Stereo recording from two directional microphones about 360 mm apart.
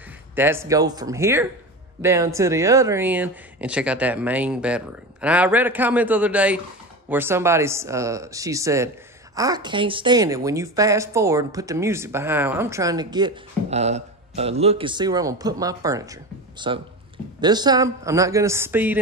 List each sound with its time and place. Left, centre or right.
0.4 s speech: centre